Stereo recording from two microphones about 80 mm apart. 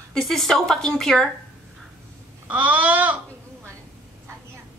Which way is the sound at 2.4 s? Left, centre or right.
Centre.